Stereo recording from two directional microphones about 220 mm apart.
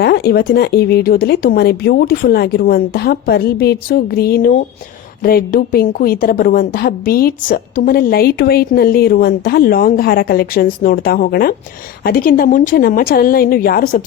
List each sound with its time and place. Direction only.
0.0 s a woman's voice: 45° left (ahead or behind)